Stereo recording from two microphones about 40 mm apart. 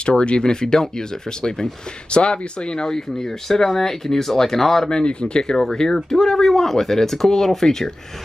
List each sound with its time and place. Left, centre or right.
0.0 s speech: left; by 4.8 s centre
4.8 s speech: left